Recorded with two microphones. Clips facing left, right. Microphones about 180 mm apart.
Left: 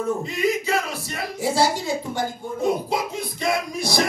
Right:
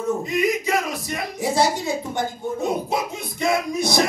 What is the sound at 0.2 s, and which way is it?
Music, 20° right (ahead or behind).